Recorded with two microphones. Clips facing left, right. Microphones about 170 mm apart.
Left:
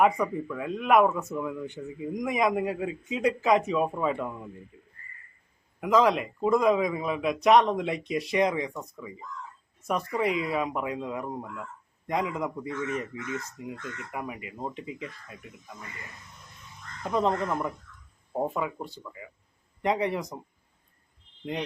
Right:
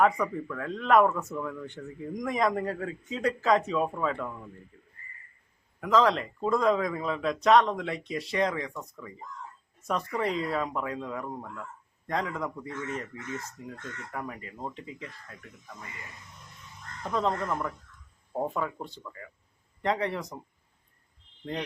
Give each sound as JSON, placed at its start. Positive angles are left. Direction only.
{"t": 0.0, "sound": "speech", "side_deg": 10}
{"t": 4.7, "sound": "crow", "side_deg": 15}
{"t": 5.8, "sound": "speech", "side_deg": 15}
{"t": 17.0, "sound": "speech", "side_deg": 15}